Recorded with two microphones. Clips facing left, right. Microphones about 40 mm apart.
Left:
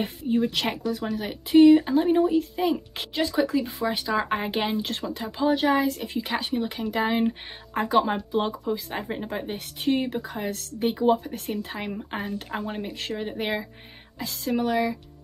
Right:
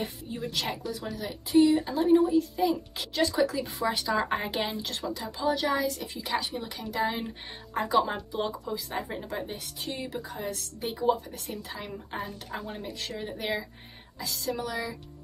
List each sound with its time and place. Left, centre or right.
0.0 s speech: left
1.9 s speech: left
3.2 s speech: left
4.2 s speech: centre
4.5 s speech: left